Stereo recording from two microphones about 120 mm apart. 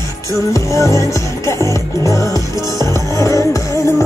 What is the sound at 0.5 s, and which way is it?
Music, 25° left (ahead or behind).